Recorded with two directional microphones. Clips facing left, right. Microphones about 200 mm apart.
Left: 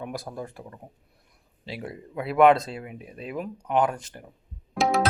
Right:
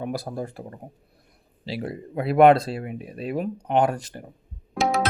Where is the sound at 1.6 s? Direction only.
35° right (ahead or behind).